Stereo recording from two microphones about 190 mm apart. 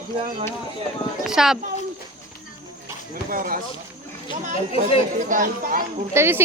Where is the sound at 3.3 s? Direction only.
50° right (ahead or behind).